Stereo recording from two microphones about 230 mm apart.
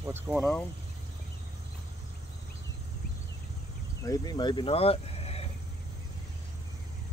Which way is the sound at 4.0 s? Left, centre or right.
Centre.